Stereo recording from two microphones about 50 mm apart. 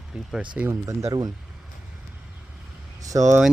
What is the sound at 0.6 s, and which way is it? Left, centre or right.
Speech, right.